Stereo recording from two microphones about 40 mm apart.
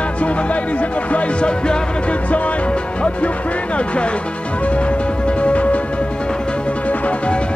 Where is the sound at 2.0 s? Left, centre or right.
Left.